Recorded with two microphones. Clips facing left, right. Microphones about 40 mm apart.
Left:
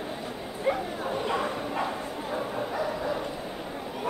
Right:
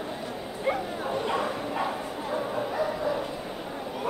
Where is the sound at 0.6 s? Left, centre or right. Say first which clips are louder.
Left 1 dB; centre.